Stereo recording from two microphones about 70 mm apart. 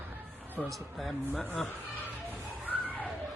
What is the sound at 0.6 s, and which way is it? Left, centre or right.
A man's voice, centre.